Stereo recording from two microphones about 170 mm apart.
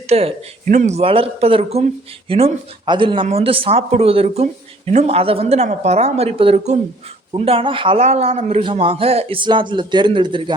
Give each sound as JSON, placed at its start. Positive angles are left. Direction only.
{"t": 0.1, "sound": "a man's voice", "side_deg": -35}
{"t": 0.6, "sound": "a man's voice", "side_deg": -45}